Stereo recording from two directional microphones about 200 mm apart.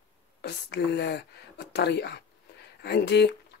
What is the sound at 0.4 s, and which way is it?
Speech, 55° left (ahead or behind).